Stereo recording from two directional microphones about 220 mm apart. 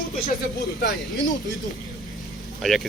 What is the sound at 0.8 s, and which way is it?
Speech, 40° left (ahead or behind).